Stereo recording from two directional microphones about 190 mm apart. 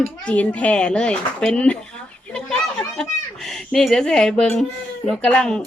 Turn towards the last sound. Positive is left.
turn(degrees=5)  # may be behind; listen again after turning